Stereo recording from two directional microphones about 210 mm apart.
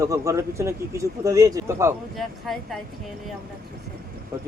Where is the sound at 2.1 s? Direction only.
Centre (ahead or behind).